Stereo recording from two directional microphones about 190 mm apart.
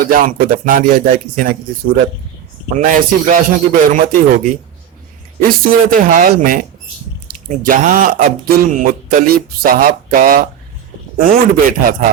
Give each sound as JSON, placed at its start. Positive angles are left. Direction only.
{"t": 0.0, "sound": "speech", "side_deg": -50}
{"t": 2.7, "sound": "speech", "side_deg": -45}
{"t": 5.4, "sound": "speech", "side_deg": -50}